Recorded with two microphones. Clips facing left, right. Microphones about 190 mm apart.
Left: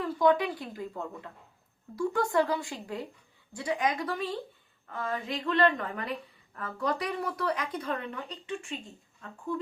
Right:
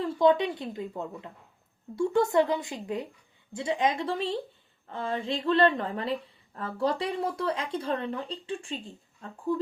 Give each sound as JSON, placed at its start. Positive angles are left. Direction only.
{"t": 0.0, "sound": "a woman's voice", "side_deg": -25}